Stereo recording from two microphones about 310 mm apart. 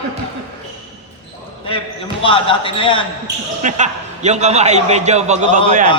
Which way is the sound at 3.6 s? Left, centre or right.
Right.